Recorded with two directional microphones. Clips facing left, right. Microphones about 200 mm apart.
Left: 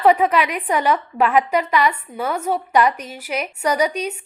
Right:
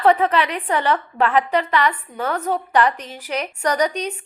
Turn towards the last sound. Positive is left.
turn(degrees=10)  # may be behind; listen again after turning